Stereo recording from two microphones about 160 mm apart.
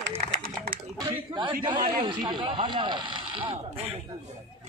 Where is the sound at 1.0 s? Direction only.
30° right (ahead or behind).